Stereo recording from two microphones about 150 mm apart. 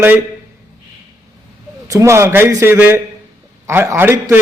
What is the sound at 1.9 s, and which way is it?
A man's voice, 20° right (ahead or behind).